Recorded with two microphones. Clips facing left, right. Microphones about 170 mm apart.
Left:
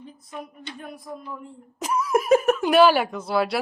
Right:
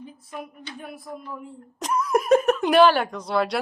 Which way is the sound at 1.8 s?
5° left (ahead or behind).